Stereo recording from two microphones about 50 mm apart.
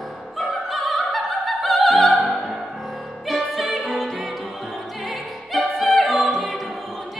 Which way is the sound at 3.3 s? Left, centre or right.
Centre.